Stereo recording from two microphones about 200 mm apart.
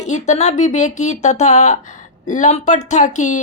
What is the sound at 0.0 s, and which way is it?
Speech, 35° left (ahead or behind).